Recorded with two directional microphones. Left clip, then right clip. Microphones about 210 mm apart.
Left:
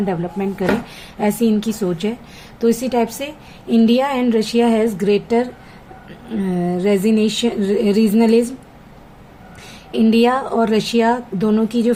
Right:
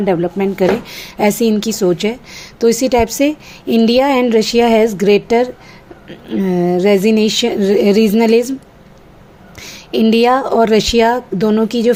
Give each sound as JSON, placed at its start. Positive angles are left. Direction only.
{"t": 0.0, "sound": "a woman's voice", "side_deg": -40}
{"t": 9.6, "sound": "a woman's voice", "side_deg": -35}